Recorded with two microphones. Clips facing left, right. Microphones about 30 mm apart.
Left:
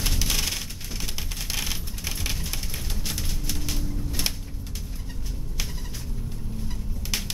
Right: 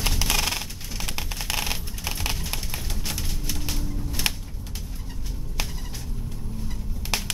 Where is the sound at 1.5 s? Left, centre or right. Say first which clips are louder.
Right 2 dB; right; by 4.2 s centre.